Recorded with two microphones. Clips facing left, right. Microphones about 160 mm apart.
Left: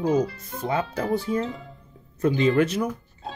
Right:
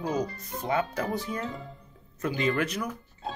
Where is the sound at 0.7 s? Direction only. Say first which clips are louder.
Left 3 dB; 30° left (ahead or behind).